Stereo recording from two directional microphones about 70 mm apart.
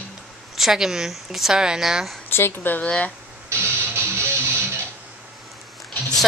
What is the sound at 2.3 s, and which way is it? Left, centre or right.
Speech, left.